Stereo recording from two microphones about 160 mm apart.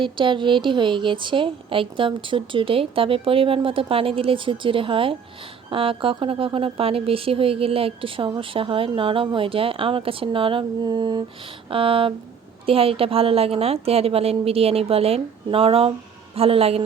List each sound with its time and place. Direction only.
0.0 s speech: 30° right (ahead or behind)